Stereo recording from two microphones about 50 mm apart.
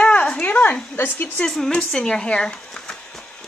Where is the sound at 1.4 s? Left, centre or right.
Centre.